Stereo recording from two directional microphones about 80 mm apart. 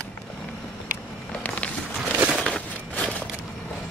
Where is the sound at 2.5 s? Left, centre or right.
Centre.